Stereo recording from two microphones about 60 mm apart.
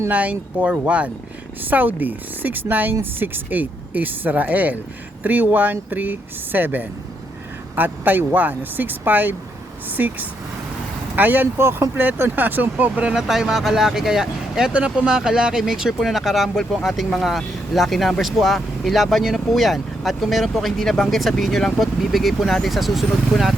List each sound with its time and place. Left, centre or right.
0.1 s speech: right
11.5 s speech: right
13.1 s speech: centre
14.7 s speech: right; by 23.6 s centre